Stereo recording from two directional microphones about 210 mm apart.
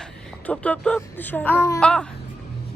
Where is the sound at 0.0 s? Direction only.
5° left (ahead or behind).